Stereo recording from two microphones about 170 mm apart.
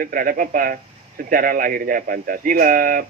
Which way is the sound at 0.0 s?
55° right (ahead or behind).